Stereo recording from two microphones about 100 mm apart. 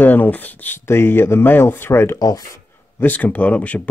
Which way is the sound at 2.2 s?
40° left (ahead or behind).